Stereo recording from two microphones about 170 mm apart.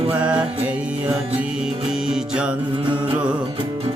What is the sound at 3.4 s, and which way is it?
Music, 35° right (ahead or behind).